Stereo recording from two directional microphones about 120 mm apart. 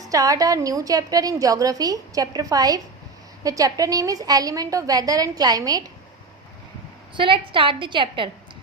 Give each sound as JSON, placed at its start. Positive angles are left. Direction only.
{"t": 0.0, "sound": "a woman's voice", "side_deg": -30}
{"t": 7.2, "sound": "a woman's voice", "side_deg": -45}